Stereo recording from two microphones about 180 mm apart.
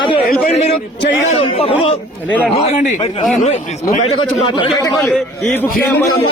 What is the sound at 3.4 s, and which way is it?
Speech, 40° left (ahead or behind).